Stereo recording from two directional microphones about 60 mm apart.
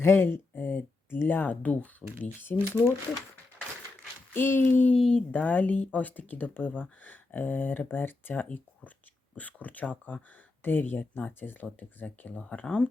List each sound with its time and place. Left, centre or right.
0.0 s speech: left
4.4 s speech: left
4.9 s speech: centre
5.3 s speech: left